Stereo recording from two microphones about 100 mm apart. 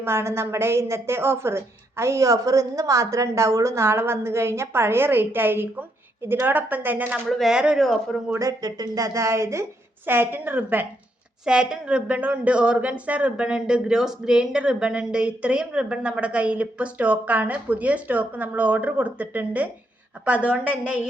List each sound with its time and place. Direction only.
0.0 s a woman's voice: 25° right (ahead or behind)
7.3 s speech: centre (ahead or behind)
7.5 s speech: 10° right (ahead or behind)
8.4 s a woman's voice: 35° right (ahead or behind); by 10.8 s 20° right (ahead or behind)
11.4 s speech: 10° right (ahead or behind)